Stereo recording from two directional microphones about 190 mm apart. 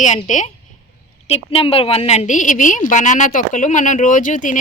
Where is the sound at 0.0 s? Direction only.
40° left (ahead or behind).